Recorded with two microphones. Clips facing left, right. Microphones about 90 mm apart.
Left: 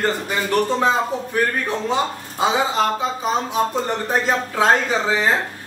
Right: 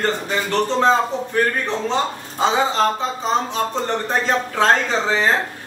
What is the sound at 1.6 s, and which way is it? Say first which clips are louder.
Speech: even; 10° left (ahead or behind).